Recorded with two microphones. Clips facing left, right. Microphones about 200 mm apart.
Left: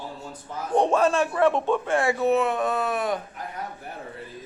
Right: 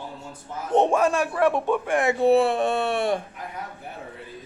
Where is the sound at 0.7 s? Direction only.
20° right (ahead or behind).